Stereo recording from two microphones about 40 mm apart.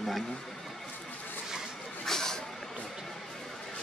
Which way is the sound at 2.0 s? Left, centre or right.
Centre.